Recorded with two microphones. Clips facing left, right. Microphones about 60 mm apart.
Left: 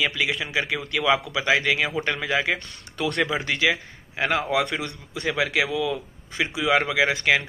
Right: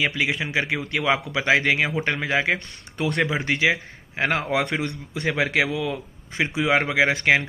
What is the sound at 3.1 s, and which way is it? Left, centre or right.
Speech, centre.